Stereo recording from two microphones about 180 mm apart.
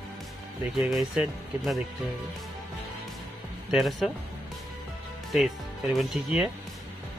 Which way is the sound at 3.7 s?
Centre (ahead or behind).